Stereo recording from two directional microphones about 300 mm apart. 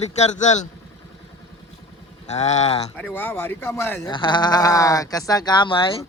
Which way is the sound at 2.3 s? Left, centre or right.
Left.